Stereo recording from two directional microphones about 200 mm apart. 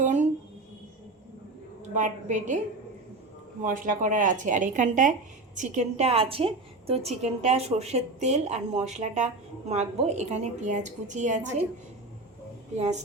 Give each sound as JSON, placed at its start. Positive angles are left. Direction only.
{"t": 0.0, "sound": "a sound", "side_deg": -35}
{"t": 2.0, "sound": "a woman's voice", "side_deg": -40}
{"t": 3.6, "sound": "a woman's voice", "side_deg": -40}
{"t": 12.7, "sound": "a woman's voice", "side_deg": -35}